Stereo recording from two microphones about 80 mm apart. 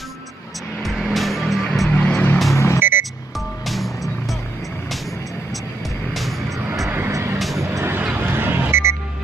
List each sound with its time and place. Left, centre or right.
0.8 s music: centre
1.9 s music: centre
2.5 s music: left
3.3 s music: centre
6.1 s music: centre
7.1 s vehicle: right
7.9 s a sound: right